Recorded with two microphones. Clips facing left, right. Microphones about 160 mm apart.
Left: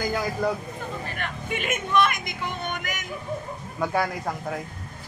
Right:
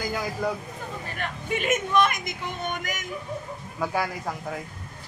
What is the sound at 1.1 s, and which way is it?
Speech, 35° right (ahead or behind).